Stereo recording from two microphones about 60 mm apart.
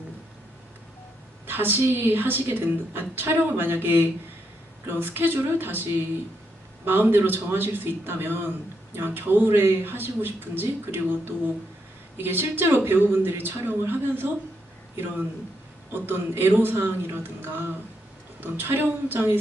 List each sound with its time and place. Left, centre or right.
1.4 s a woman's voice: right
15.9 s a woman's voice: right